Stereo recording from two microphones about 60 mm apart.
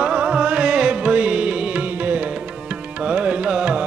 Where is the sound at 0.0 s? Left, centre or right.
Right.